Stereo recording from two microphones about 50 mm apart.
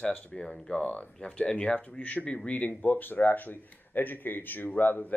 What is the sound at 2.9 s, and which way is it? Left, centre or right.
Speech, left.